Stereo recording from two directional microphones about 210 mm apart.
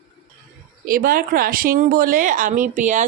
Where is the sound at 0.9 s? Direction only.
45° right (ahead or behind).